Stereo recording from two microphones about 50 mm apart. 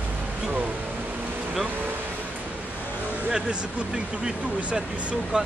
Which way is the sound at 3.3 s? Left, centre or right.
Centre.